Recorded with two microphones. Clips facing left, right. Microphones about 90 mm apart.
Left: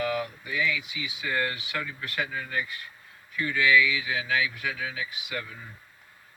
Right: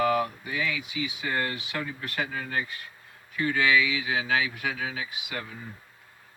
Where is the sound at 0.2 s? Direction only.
30° right (ahead or behind).